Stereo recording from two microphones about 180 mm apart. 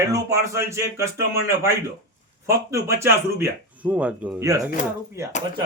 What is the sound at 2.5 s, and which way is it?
Speech, 15° right (ahead or behind).